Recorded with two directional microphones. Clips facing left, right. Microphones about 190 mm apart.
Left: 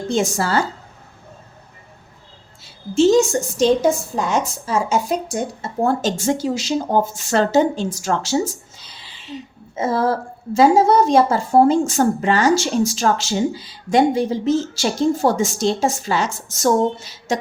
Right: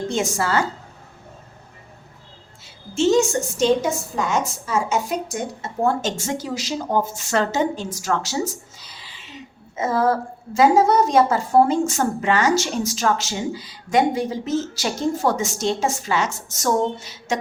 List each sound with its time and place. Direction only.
0.1 s a woman's voice: 35° left (ahead or behind)
2.6 s a woman's voice: 35° left (ahead or behind)